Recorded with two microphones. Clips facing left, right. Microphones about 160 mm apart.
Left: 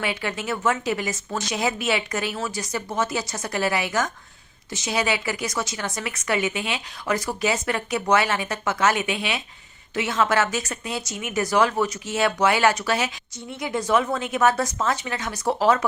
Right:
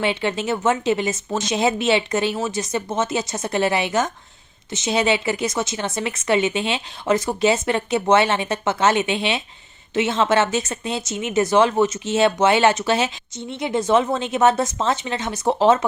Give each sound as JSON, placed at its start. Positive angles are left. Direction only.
{"t": 0.0, "sound": "speech", "side_deg": -25}